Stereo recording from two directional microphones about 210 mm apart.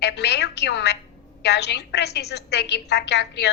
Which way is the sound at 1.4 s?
55° left (ahead or behind).